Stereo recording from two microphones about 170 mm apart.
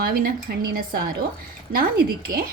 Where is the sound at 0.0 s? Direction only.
60° right (ahead or behind).